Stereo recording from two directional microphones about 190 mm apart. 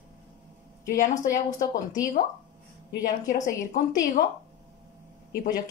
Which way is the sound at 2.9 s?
45° left (ahead or behind).